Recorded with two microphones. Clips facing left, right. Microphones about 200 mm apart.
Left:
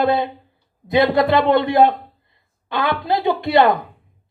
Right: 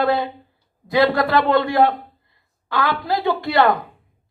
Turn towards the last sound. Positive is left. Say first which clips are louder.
# left 2 dB
turn(degrees=20)  # may be behind; listen again after turning